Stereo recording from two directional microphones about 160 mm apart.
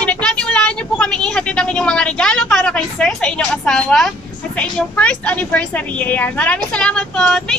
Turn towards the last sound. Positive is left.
turn(degrees=5)  # may be behind; listen again after turning